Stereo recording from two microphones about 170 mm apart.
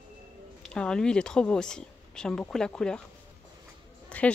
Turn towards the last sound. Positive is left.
turn(degrees=5)  # may be behind; listen again after turning